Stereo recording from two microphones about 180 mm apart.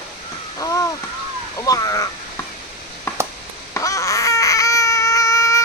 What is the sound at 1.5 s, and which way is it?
Speech, 20° left (ahead or behind).